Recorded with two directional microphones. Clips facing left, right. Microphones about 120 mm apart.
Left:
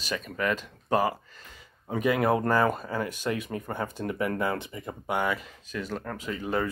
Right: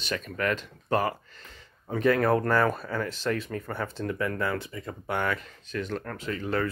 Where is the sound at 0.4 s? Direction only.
10° left (ahead or behind).